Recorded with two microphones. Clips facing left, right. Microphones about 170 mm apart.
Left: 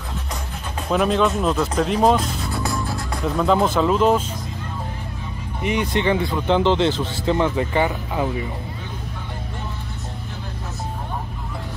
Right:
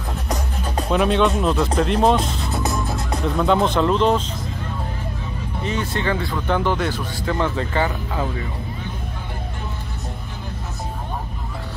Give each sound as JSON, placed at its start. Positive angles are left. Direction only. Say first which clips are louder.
{"t": 0.9, "sound": "speech", "louder": "even", "side_deg": 0}
{"t": 2.5, "sound": "music", "louder": "right 2 dB", "side_deg": -20}
{"t": 3.3, "sound": "speech", "louder": "even", "side_deg": 5}
{"t": 5.6, "sound": "speech", "louder": "left 4 dB", "side_deg": 15}